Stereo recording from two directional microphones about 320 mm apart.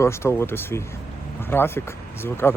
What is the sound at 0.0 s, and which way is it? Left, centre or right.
A man's voice, centre.